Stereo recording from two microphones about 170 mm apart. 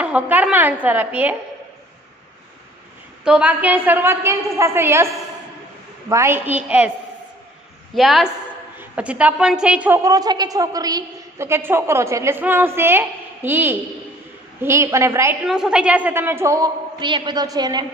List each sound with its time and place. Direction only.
0.0 s a woman's voice: 10° right (ahead or behind)
3.3 s a woman's voice: 5° right (ahead or behind)
7.9 s a woman's voice: centre (ahead or behind)
15.4 s a woman's voice: 5° right (ahead or behind); by 17.8 s 25° right (ahead or behind)